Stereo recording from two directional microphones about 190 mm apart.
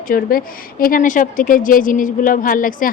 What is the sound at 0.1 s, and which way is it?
A woman's voice, 50° left (ahead or behind).